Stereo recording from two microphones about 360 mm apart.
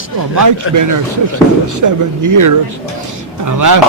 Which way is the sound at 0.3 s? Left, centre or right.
Right.